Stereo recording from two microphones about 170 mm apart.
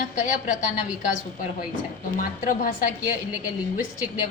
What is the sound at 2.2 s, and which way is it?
Speech, 55° left (ahead or behind).